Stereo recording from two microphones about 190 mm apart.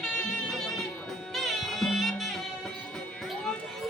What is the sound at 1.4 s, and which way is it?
Music, centre (ahead or behind).